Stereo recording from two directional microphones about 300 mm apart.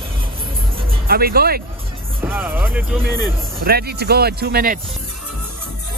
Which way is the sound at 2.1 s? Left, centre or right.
Centre.